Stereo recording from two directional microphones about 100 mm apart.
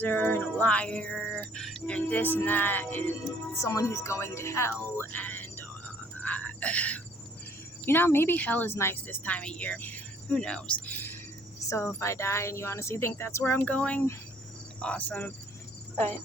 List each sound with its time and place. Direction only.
0.0 s a woman's voice: 20° left (ahead or behind)
3.6 s a woman's voice: 30° left (ahead or behind)
4.9 s a sound: 20° left (ahead or behind)
7.9 s a woman's voice: 20° left (ahead or behind)